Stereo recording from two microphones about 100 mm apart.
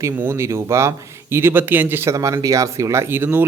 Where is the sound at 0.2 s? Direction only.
25° right (ahead or behind).